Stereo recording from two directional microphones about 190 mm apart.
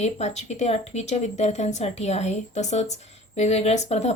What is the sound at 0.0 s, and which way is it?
Speech, 35° left (ahead or behind).